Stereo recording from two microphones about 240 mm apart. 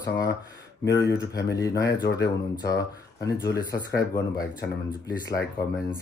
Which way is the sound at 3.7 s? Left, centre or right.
Left.